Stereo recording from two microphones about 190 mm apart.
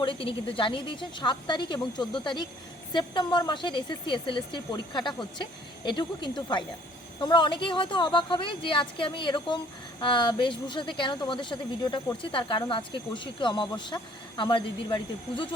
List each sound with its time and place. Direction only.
0.0 s a woman's voice: 25° left (ahead or behind)